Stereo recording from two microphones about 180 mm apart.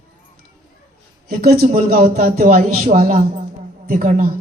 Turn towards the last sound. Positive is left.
turn(degrees=-45)  # may be behind; listen again after turning